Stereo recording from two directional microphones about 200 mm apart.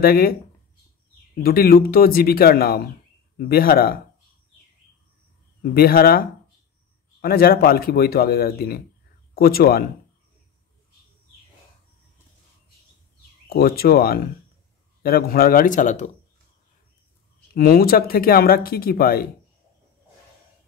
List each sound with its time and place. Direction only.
0.0 s speech: 50° left (ahead or behind)
1.4 s speech: 50° left (ahead or behind)
5.6 s speech: 50° left (ahead or behind)
13.5 s speech: 50° left (ahead or behind)
17.6 s speech: 50° left (ahead or behind)